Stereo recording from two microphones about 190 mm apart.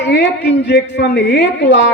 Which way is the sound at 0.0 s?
65° left (ahead or behind).